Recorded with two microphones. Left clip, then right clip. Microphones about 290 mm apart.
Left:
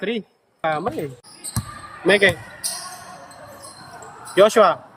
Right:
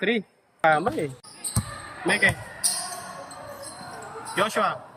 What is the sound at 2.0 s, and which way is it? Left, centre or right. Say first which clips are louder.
Speech: left 6 dB; centre.